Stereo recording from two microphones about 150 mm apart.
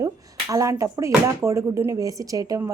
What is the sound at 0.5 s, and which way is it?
A woman's voice, 20° right (ahead or behind).